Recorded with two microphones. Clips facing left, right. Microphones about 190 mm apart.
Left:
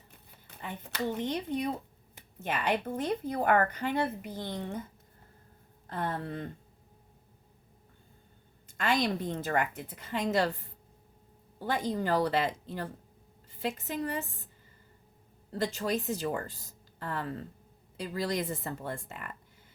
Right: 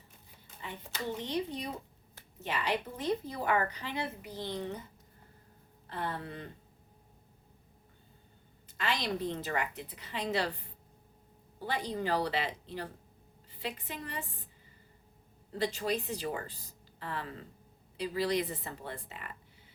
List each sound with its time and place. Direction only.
0.4 s a woman's voice: 65° left (ahead or behind)
5.9 s a woman's voice: 45° left (ahead or behind)
8.8 s a woman's voice: 50° left (ahead or behind)
15.5 s a woman's voice: 45° left (ahead or behind)